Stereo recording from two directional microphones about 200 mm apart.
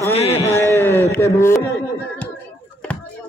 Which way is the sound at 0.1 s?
30° left (ahead or behind).